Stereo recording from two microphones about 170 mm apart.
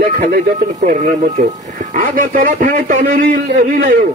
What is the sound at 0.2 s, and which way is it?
A man's voice, 45° right (ahead or behind).